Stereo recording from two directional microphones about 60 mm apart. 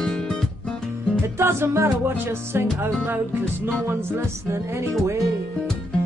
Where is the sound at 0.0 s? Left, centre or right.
Centre.